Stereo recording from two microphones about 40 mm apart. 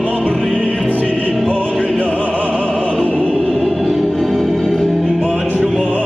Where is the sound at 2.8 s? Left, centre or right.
Right.